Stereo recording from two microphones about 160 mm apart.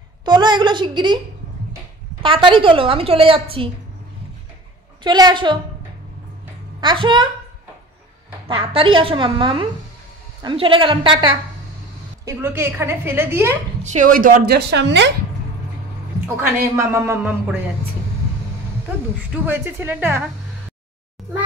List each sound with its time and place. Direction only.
0.2 s a woman's voice: 30° right (ahead or behind)
2.2 s a woman's voice: 30° right (ahead or behind)
5.0 s a woman's voice: 25° right (ahead or behind)
6.8 s a woman's voice: 30° right (ahead or behind)
8.5 s a woman's voice: 35° right (ahead or behind)
12.3 s a woman's voice: 15° right (ahead or behind)
13.8 s a woman's voice: 55° right (ahead or behind); by 15.1 s 90° right
16.7 s a woman's voice: 15° right (ahead or behind)
19.3 s a woman's voice: 10° right (ahead or behind)